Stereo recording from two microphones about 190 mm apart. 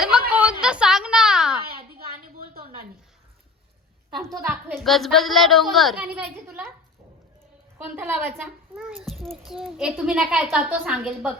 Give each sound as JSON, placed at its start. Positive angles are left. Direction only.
{"t": 0.0, "sound": "a sound", "side_deg": -5}
{"t": 4.8, "sound": "a woman's voice", "side_deg": 0}
{"t": 7.9, "sound": "a woman's voice", "side_deg": -10}
{"t": 9.0, "sound": "a child's voice", "side_deg": 0}